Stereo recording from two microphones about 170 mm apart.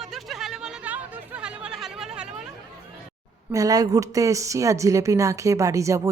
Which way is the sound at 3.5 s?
20° right (ahead or behind).